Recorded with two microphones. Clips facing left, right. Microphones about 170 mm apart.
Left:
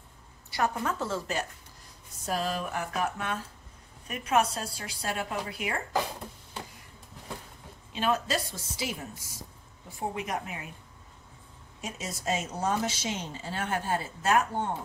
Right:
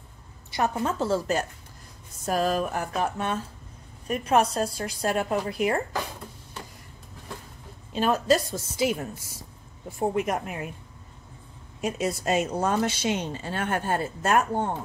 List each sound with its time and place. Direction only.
0.5 s a woman's voice: 25° right (ahead or behind)
4.1 s a woman's voice: 40° right (ahead or behind)
7.9 s a woman's voice: 40° right (ahead or behind)
11.8 s speech: 60° right (ahead or behind)